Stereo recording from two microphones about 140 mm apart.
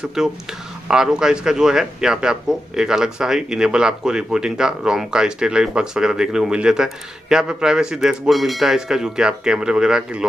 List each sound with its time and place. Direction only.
0.0 s a man's voice: 5° right (ahead or behind)